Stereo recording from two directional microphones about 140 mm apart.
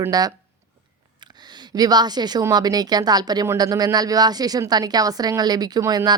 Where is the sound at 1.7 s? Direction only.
30° right (ahead or behind).